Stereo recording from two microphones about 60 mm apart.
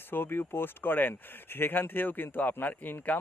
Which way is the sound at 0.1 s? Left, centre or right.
Left.